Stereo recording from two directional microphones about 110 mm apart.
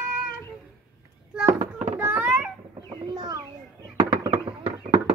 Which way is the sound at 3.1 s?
35° right (ahead or behind).